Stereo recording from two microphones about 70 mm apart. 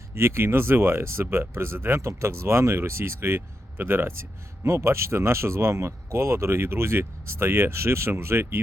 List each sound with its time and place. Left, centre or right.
0.1 s speech: right